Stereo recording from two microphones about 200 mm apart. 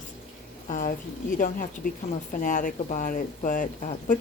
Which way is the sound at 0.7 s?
40° left (ahead or behind).